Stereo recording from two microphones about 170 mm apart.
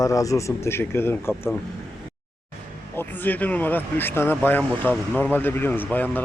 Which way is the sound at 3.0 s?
10° left (ahead or behind).